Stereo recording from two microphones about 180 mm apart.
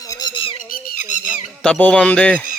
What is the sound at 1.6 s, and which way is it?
Speech, 5° left (ahead or behind).